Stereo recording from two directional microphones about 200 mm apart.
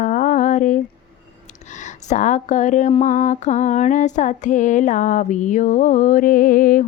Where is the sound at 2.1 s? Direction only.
35° left (ahead or behind).